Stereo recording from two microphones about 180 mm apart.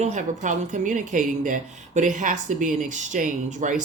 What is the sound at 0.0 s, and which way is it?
A woman's voice, 45° right (ahead or behind).